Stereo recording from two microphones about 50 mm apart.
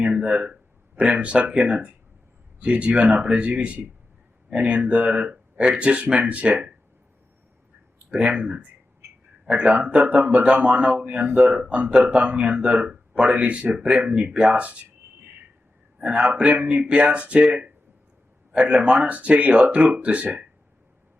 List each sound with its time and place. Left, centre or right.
0.0 s speech: centre
8.1 s speech: right
16.0 s speech: right
18.5 s speech: right